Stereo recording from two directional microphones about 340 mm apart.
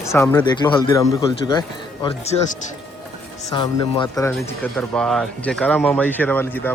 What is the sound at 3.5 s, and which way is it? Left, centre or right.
Speech, centre.